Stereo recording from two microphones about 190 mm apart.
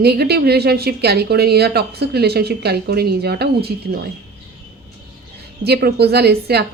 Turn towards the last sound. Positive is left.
turn(degrees=-60)  # may be behind; listen again after turning